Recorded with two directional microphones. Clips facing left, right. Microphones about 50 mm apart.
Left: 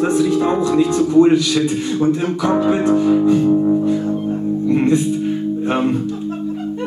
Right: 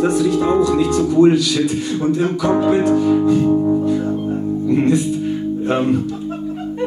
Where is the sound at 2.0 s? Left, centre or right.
Centre.